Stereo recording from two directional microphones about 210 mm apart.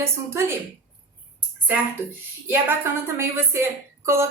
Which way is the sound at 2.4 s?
10° right (ahead or behind).